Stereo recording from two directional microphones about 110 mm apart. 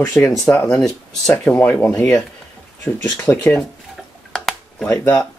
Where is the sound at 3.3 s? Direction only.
30° left (ahead or behind).